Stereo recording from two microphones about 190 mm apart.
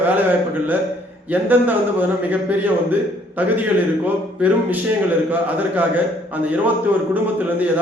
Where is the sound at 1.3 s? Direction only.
10° right (ahead or behind).